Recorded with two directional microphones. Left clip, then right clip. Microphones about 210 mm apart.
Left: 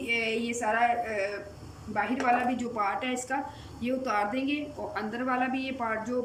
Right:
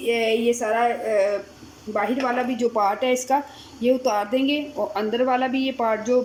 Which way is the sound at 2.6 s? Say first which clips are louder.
Right 9 dB; 30° right (ahead or behind).